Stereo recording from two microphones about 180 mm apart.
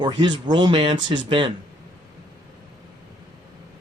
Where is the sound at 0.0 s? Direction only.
25° right (ahead or behind).